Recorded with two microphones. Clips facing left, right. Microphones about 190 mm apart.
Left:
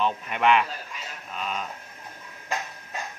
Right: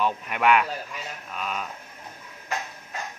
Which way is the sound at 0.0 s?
5° right (ahead or behind).